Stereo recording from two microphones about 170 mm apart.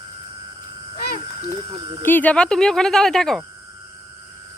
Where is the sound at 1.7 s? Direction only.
25° right (ahead or behind).